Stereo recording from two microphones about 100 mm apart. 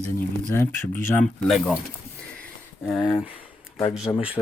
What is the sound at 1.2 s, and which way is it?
Speech, 5° left (ahead or behind).